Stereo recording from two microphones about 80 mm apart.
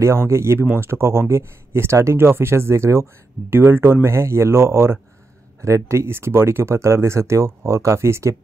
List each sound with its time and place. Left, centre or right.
0.0 s speech: right